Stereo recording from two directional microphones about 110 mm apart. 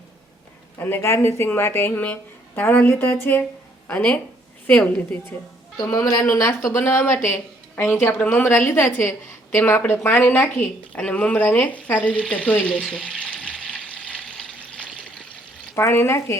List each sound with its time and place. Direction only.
0.8 s a woman's voice: 20° left (ahead or behind)
4.6 s a woman's voice: 15° left (ahead or behind)
5.7 s a woman's voice: 35° left (ahead or behind); by 15.0 s 5° left (ahead or behind)
15.7 s speech: 25° left (ahead or behind)